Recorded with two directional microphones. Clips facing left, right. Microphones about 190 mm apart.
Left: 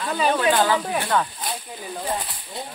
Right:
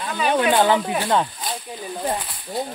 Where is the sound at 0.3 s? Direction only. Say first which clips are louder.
Right 3 dB; 20° right (ahead or behind).